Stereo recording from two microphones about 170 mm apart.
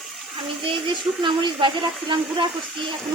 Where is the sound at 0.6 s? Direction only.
30° right (ahead or behind).